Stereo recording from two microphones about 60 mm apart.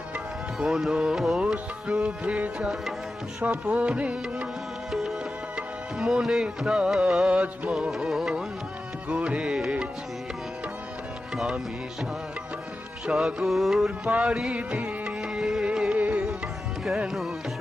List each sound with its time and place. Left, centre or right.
0.6 s music: centre
4.9 s music: centre; by 7.7 s right
7.7 s music: centre
9.0 s music: right
13.1 s music: centre
14.0 s music: centre
15.4 s music: centre
16.0 s music: right